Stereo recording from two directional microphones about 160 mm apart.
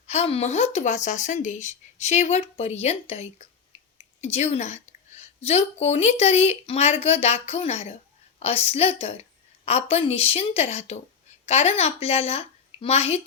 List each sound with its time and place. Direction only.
0.1 s a woman's voice: 40° left (ahead or behind)